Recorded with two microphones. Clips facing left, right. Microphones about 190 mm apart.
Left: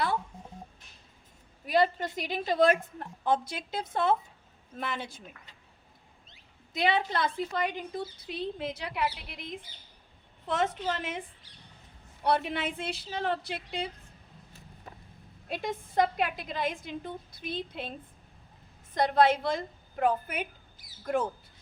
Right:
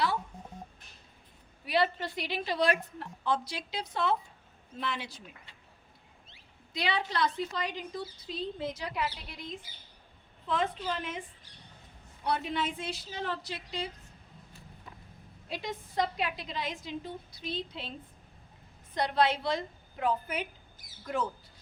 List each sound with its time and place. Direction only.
1.6 s a woman's voice: 45° left (ahead or behind)
6.7 s a woman's voice: 50° left (ahead or behind)
9.0 s speech: 10° left (ahead or behind)
10.4 s a woman's voice: 75° left (ahead or behind); by 13.9 s 55° left (ahead or behind)
15.4 s a woman's voice: 55° left (ahead or behind)
18.9 s a woman's voice: 50° left (ahead or behind)